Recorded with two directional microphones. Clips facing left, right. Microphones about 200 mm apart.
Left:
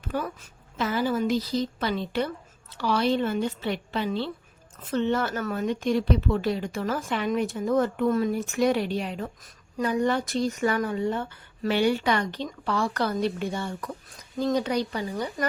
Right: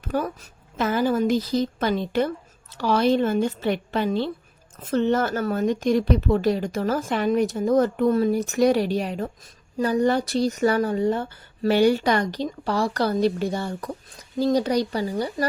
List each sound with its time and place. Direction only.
0.1 s speech: 40° right (ahead or behind)